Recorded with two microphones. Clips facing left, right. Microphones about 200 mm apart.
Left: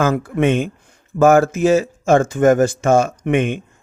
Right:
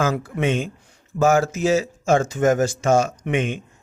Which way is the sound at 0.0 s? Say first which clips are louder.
Left 5 dB; 55° left (ahead or behind).